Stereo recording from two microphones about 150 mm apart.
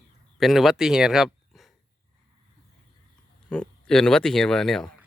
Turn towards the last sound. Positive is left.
turn(degrees=5)  # may be behind; listen again after turning